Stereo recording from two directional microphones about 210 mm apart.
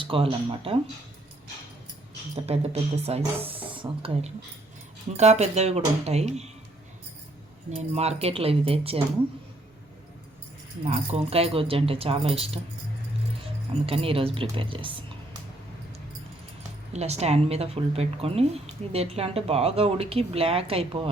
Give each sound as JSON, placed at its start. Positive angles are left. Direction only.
{"t": 0.0, "sound": "a woman's voice", "side_deg": -25}
{"t": 2.3, "sound": "a woman's voice", "side_deg": -30}
{"t": 7.7, "sound": "a woman's voice", "side_deg": -30}
{"t": 10.8, "sound": "a woman's voice", "side_deg": -30}
{"t": 13.8, "sound": "a woman's voice", "side_deg": -25}
{"t": 16.9, "sound": "a woman's voice", "side_deg": -30}